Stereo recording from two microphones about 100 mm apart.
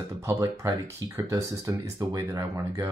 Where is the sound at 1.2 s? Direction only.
35° right (ahead or behind).